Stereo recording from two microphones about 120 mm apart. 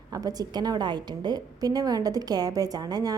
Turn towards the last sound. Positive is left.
turn(degrees=-30)  # may be behind; listen again after turning